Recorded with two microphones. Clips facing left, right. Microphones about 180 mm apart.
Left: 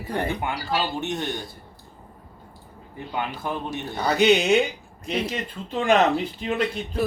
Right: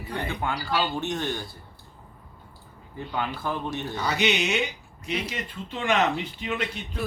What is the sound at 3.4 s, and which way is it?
Speech, 15° left (ahead or behind).